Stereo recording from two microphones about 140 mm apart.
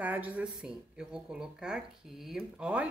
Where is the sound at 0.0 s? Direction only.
10° right (ahead or behind).